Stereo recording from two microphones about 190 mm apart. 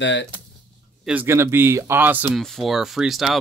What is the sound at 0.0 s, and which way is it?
Speech, 70° left (ahead or behind).